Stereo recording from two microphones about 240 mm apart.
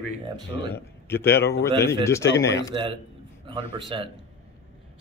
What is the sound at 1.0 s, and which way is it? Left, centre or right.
Speech, centre.